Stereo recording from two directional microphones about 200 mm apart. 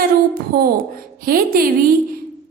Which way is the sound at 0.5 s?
50° right (ahead or behind).